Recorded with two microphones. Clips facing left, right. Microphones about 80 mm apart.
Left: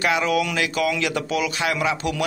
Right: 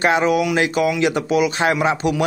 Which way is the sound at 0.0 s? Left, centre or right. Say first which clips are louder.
Right 4 dB; right.